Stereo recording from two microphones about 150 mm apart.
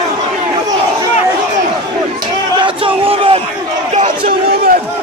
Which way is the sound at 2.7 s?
35° right (ahead or behind).